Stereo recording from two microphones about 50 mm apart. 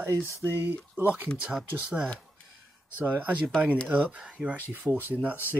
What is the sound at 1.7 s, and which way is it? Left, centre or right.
Speech, right.